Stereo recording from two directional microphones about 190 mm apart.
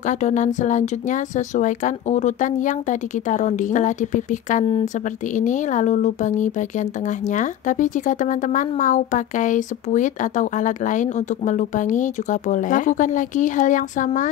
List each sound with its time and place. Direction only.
0.0 s speech: 40° left (ahead or behind)